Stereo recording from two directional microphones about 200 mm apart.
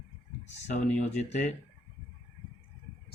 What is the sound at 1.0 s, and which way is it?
Speech, 35° left (ahead or behind).